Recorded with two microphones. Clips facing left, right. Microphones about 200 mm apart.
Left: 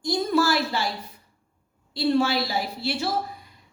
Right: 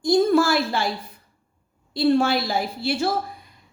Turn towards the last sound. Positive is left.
turn(degrees=-50)  # may be behind; listen again after turning